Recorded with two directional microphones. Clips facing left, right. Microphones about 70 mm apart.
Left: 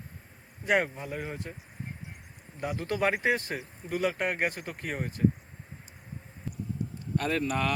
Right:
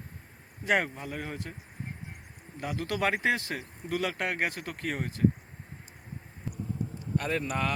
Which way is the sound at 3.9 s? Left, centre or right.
Right.